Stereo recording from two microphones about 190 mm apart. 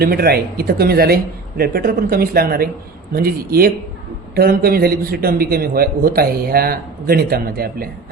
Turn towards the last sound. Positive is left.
turn(degrees=-50)  # may be behind; listen again after turning